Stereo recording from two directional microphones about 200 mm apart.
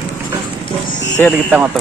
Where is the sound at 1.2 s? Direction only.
10° left (ahead or behind).